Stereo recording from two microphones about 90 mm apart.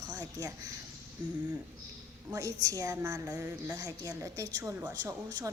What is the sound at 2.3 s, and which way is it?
Speech, 40° right (ahead or behind).